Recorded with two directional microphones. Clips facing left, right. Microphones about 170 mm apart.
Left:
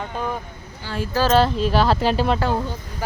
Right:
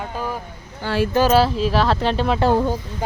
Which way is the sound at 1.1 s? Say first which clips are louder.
Even; 10° right (ahead or behind).